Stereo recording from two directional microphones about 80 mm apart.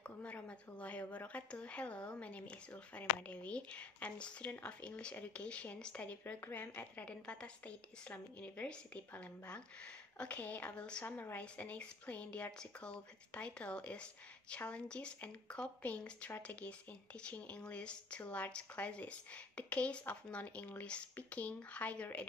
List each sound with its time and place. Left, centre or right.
0.0 s a woman's voice: centre